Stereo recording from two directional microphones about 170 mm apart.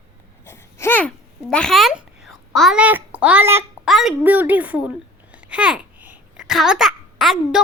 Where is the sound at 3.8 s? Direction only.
Centre (ahead or behind).